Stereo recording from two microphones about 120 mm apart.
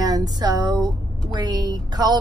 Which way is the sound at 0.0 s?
30° right (ahead or behind).